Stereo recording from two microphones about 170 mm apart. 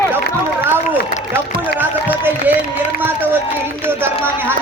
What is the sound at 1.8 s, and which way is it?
Run, 10° right (ahead or behind).